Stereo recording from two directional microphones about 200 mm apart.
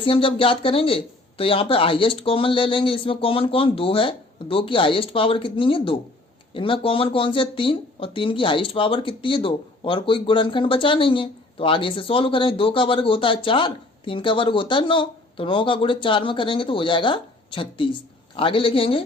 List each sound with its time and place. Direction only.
0.0 s speech: 25° left (ahead or behind)